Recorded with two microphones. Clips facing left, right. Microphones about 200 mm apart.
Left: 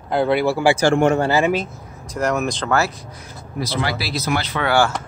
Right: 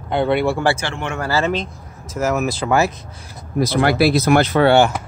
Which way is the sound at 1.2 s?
15° left (ahead or behind).